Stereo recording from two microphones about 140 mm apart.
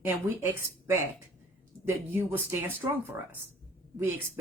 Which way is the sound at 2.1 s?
15° right (ahead or behind).